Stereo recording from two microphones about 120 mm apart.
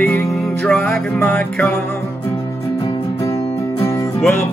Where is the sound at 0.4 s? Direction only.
5° left (ahead or behind).